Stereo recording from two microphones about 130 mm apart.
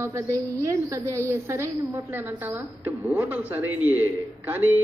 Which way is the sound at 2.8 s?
15° right (ahead or behind).